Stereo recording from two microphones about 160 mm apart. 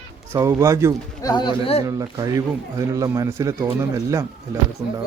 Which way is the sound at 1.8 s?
25° right (ahead or behind).